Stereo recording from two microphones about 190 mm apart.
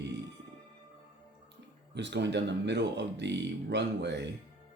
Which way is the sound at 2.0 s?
70° right (ahead or behind).